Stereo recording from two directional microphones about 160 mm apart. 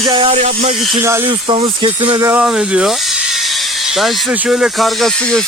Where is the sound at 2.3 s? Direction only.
5° right (ahead or behind).